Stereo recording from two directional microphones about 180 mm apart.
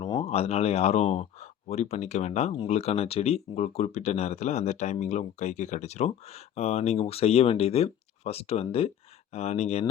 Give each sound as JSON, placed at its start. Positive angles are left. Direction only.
{"t": 0.0, "sound": "speech", "side_deg": 30}